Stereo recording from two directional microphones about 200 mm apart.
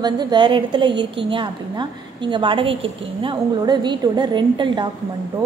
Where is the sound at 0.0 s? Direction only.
20° right (ahead or behind).